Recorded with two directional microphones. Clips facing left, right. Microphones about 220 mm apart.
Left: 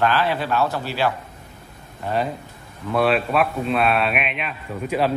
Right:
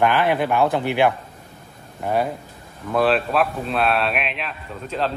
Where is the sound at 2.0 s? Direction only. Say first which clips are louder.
Right 2 dB; 10° right (ahead or behind).